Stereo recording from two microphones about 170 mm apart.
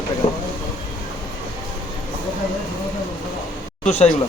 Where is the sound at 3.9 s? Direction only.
40° left (ahead or behind).